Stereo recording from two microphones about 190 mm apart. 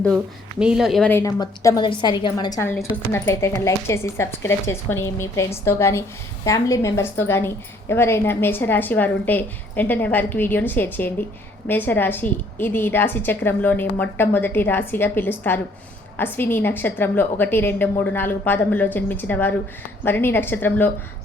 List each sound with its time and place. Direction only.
0.6 s a woman's voice: 5° right (ahead or behind)
1.1 s a woman's voice: 15° left (ahead or behind)